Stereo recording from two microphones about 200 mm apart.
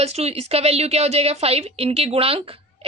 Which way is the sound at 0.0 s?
30° right (ahead or behind).